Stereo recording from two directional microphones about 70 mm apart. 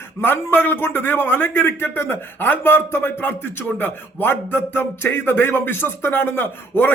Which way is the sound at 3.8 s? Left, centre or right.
Left.